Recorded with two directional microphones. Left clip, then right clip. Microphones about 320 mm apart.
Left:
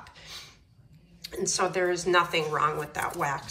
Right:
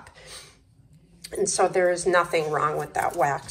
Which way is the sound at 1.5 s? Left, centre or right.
Centre.